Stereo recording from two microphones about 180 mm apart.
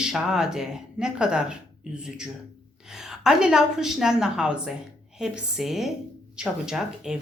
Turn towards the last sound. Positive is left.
turn(degrees=-5)  # may be behind; listen again after turning